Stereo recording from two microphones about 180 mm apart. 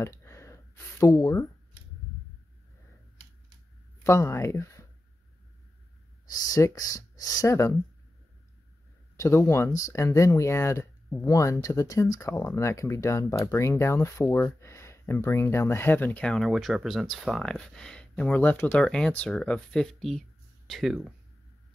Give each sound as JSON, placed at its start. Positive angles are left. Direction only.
{"t": 0.0, "sound": "a sound", "side_deg": 15}
{"t": 4.0, "sound": "speech", "side_deg": 15}
{"t": 6.5, "sound": "speech", "side_deg": 20}
{"t": 9.1, "sound": "speech", "side_deg": 15}